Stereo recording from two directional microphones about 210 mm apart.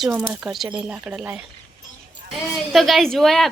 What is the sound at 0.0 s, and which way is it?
A woman's voice, 5° right (ahead or behind).